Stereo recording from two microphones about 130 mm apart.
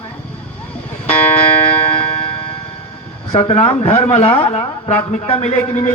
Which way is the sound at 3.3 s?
50° left (ahead or behind).